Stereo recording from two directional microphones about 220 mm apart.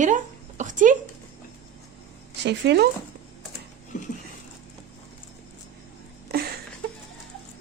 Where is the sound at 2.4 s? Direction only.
50° right (ahead or behind).